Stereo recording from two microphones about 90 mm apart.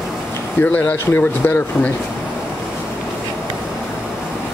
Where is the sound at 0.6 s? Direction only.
20° left (ahead or behind).